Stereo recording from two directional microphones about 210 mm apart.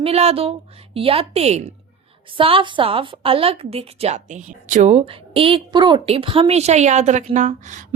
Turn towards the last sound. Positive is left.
turn(degrees=-35)  # may be behind; listen again after turning